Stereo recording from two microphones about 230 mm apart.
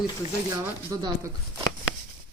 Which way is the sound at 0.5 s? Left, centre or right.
Centre.